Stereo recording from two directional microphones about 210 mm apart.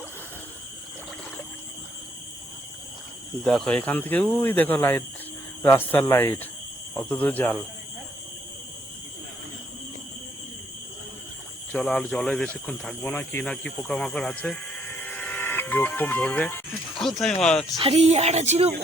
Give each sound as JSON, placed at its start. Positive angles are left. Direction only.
{"t": 3.4, "sound": "speech", "side_deg": 0}
{"t": 11.7, "sound": "speech", "side_deg": 5}
{"t": 17.8, "sound": "speech", "side_deg": -30}